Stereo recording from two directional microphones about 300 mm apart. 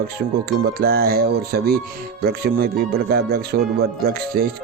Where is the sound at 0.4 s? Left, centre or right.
Right.